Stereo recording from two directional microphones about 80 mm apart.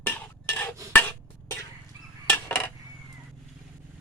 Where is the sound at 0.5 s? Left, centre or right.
Centre.